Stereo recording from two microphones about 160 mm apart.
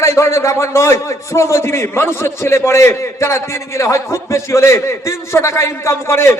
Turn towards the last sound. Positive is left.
turn(degrees=15)  # may be behind; listen again after turning